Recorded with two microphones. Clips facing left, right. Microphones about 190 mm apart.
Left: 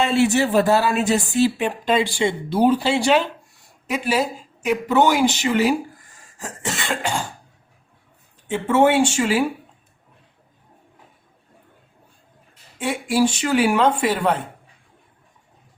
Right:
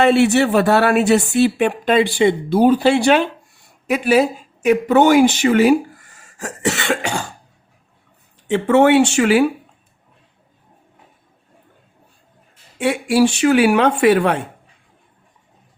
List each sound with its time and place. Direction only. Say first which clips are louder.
0.0 s speech: right 5 dB; 65° right (ahead or behind)
6.4 s speech: right 7 dB; 70° right (ahead or behind)
8.4 s speech: right 4 dB; 70° right (ahead or behind)
12.8 s speech: right 4 dB; 70° right (ahead or behind)